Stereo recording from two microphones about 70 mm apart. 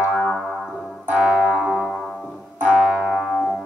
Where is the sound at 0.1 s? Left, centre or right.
Centre.